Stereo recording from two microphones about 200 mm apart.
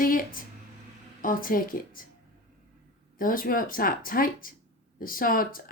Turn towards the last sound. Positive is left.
turn(degrees=45)  # may be behind; listen again after turning